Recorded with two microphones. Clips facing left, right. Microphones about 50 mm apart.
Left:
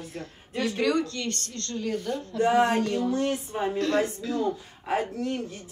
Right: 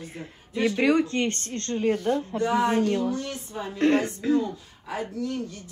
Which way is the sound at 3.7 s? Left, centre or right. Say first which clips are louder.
Right 5 dB; right.